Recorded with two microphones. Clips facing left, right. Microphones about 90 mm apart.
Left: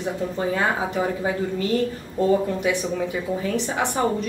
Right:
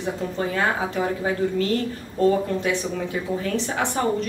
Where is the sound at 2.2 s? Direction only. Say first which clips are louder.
Even; 15° left (ahead or behind).